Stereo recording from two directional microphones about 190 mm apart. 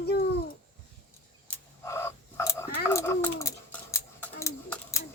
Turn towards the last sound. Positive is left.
turn(degrees=15)  # may be behind; listen again after turning